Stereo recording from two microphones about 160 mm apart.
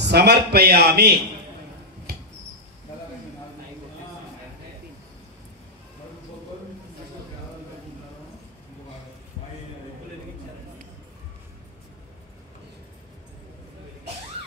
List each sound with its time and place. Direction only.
0.0 s a man's voice: 90° right
2.1 s rodents: 85° right